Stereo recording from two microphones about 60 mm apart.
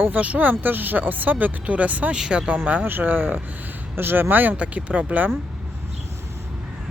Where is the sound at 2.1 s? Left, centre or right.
Centre.